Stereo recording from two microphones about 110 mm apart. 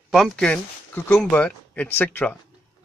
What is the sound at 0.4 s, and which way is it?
Speech, 15° left (ahead or behind).